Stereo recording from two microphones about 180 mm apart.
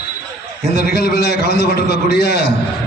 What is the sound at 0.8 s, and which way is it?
A man's voice, 60° left (ahead or behind).